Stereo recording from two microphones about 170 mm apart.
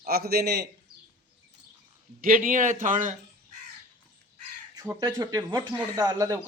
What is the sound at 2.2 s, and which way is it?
Speech, 55° right (ahead or behind).